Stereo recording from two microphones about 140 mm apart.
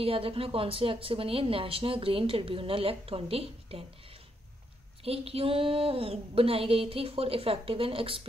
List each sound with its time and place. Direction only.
0.0 s a woman's voice: 40° right (ahead or behind)
5.0 s a woman's voice: 45° right (ahead or behind)